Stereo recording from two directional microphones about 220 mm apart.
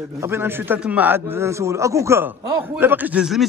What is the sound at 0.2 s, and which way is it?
A man's voice, 10° right (ahead or behind).